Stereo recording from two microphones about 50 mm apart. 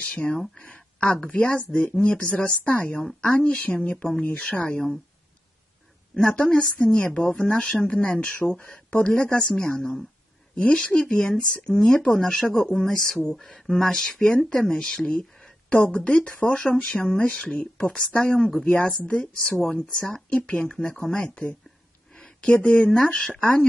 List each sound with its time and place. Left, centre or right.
0.1 s speech: left
6.3 s speech: centre
7.2 s speech: centre
14.8 s speech: centre
15.7 s speech: left
20.3 s speech: left
20.6 s speech: centre
21.1 s speech: centre
22.1 s a sound: centre
22.5 s speech: left